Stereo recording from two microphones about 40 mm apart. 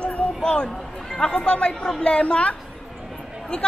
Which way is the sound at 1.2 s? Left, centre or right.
Left.